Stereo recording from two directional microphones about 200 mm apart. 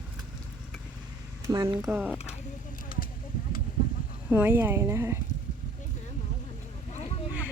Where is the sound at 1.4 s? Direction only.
20° right (ahead or behind).